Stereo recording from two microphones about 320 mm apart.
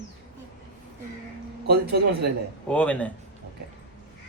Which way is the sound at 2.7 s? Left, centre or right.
Centre.